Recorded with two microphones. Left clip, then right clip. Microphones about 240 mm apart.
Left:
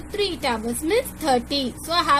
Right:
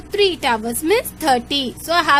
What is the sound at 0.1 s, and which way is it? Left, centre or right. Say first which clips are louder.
A woman's voice: right 7 dB; right.